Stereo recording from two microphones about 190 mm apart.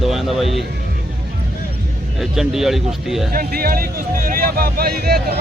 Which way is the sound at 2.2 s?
Centre (ahead or behind).